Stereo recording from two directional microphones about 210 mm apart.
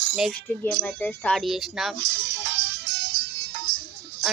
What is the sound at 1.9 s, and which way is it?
Music, 55° right (ahead or behind).